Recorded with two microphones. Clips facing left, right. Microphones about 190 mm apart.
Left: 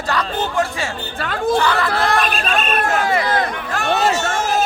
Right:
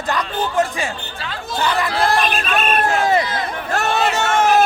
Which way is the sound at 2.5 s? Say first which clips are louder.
Right 1 dB; 50° right (ahead or behind).